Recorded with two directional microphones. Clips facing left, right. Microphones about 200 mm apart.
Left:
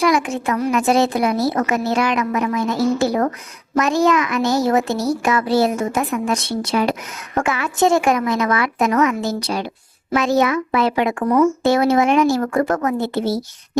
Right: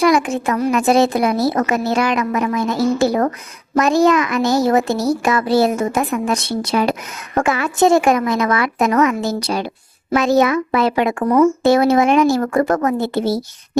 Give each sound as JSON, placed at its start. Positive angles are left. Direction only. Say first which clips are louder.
{"t": 0.0, "sound": "a child's voice", "louder": "right 3 dB", "side_deg": -35}
{"t": 3.8, "sound": "a child's voice", "louder": "right 3 dB", "side_deg": -35}